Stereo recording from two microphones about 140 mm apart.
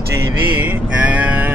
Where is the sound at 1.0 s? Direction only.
10° right (ahead or behind).